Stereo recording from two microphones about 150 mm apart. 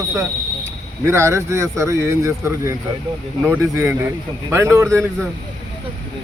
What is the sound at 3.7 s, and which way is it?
Speech, 20° right (ahead or behind).